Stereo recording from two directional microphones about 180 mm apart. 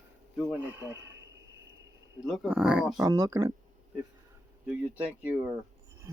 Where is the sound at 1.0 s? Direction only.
80° right.